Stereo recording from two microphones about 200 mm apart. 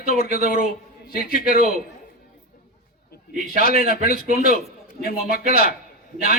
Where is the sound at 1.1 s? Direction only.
45° left (ahead or behind).